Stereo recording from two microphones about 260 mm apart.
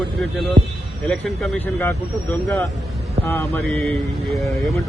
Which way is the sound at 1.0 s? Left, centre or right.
Centre.